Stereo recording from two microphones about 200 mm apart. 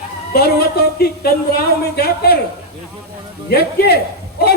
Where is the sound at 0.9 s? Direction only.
50° left (ahead or behind).